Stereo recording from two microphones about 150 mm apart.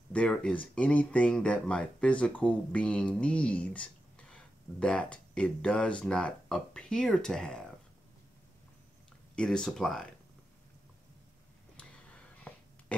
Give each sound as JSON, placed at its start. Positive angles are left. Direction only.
{"t": 0.1, "sound": "speech", "side_deg": 5}
{"t": 9.3, "sound": "speech", "side_deg": 5}
{"t": 12.5, "sound": "a sound", "side_deg": 10}